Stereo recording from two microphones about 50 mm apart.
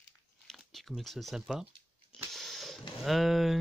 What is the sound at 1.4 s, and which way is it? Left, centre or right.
Speech, centre.